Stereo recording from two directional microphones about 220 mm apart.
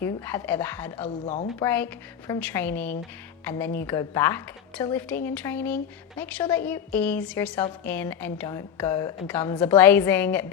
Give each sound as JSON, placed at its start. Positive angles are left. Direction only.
{"t": 0.0, "sound": "a woman's voice", "side_deg": 10}
{"t": 1.2, "sound": "a woman's voice", "side_deg": 25}
{"t": 1.6, "sound": "a woman's voice", "side_deg": 10}